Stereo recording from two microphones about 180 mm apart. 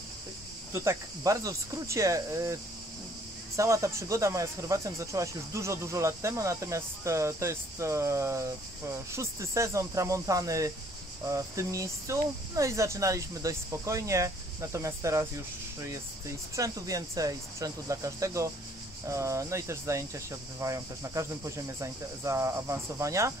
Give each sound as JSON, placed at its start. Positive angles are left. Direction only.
{"t": 0.7, "sound": "speech", "side_deg": -15}